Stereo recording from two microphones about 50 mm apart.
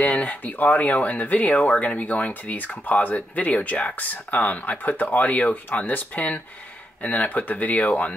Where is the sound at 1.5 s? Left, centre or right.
Centre.